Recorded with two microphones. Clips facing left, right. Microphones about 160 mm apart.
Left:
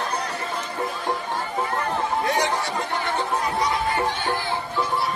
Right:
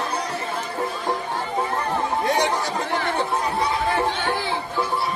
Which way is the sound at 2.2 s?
30° right (ahead or behind).